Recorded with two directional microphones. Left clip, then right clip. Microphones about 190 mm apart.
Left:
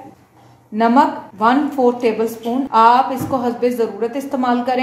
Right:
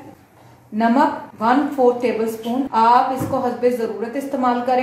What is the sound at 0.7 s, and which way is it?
A woman's voice, 45° left (ahead or behind).